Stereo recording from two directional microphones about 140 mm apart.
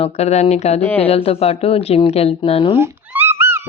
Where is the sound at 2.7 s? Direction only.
15° right (ahead or behind).